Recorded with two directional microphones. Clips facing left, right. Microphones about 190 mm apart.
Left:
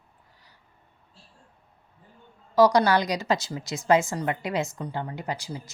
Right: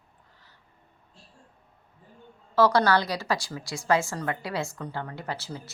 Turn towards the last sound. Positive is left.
turn(degrees=15)  # may be behind; listen again after turning